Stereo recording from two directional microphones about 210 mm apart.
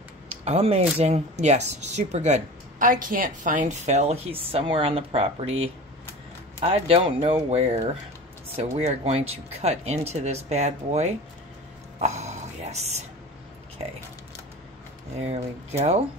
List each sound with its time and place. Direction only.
0.3 s speech: 30° right (ahead or behind)
12.0 s a sound: 30° right (ahead or behind)
15.1 s speech: 30° right (ahead or behind)